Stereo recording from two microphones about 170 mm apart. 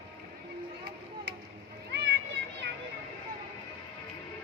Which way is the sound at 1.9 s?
85° right.